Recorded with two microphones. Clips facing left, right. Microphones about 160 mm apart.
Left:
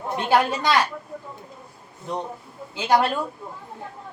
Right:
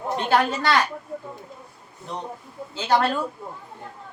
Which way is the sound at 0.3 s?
15° left (ahead or behind).